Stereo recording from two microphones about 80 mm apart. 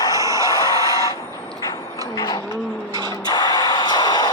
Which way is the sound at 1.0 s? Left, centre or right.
Left.